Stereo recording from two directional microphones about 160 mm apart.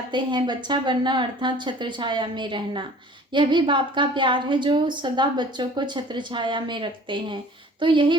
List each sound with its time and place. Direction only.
0.1 s a woman's voice: 30° right (ahead or behind)